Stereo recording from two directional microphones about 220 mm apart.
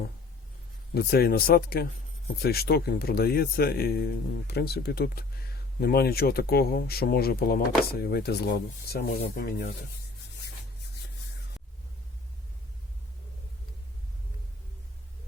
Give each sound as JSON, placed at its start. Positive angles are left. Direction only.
{"t": 0.9, "sound": "speech", "side_deg": 45}